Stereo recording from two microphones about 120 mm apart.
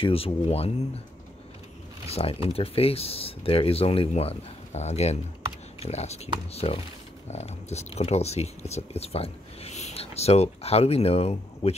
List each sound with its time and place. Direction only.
0.0 s speech: 55° left (ahead or behind)
2.0 s speech: 55° left (ahead or behind)